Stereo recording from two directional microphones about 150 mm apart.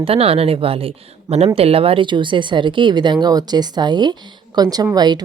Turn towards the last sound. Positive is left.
turn(degrees=-25)  # may be behind; listen again after turning